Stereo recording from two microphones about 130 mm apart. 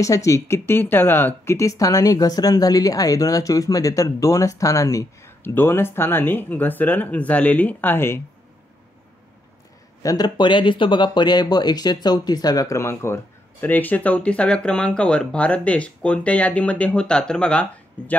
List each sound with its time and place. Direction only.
0.0 s speech: 25° left (ahead or behind)
10.0 s speech: 30° left (ahead or behind); by 18.1 s 10° left (ahead or behind)